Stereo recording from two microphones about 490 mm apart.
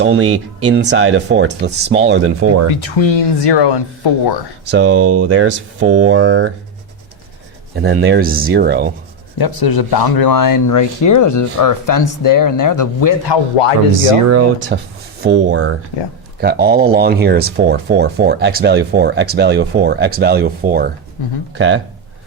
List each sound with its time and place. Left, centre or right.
0.0 s speech: right
2.6 s speech: left
4.7 s speech: right
7.8 s speech: centre
9.4 s speech: left
14.3 s speech: right